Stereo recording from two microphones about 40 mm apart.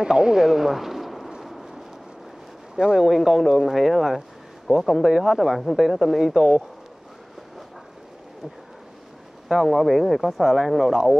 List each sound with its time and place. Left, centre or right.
0.0 s speech: centre
1.4 s a sound: centre
2.7 s speech: centre
3.0 s speech: centre
9.5 s speech: centre